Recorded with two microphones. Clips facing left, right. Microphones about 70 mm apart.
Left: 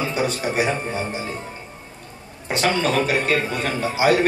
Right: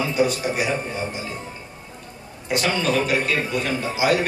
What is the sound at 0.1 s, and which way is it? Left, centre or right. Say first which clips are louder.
Speech: right 1 dB; left.